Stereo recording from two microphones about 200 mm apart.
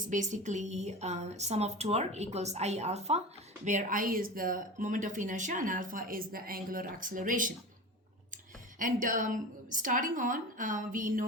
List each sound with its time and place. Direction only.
0.1 s speech: 40° right (ahead or behind)
8.8 s speech: 40° right (ahead or behind)